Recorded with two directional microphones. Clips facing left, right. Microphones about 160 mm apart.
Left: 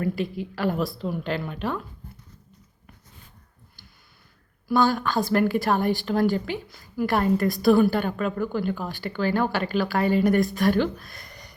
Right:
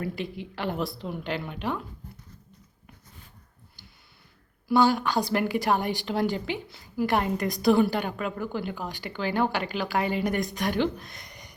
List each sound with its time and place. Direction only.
0.2 s a woman's voice: 20° right (ahead or behind)
4.7 s a woman's voice: 15° right (ahead or behind)